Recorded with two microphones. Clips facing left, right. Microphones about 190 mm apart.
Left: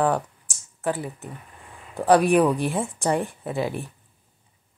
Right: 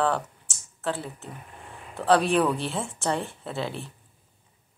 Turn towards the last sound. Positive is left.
turn(degrees=15)  # may be behind; listen again after turning